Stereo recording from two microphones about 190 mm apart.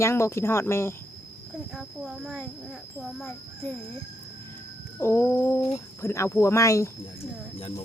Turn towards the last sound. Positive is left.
turn(degrees=15)  # may be behind; listen again after turning